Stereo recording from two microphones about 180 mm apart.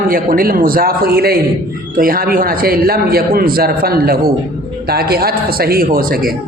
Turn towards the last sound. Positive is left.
turn(degrees=-55)  # may be behind; listen again after turning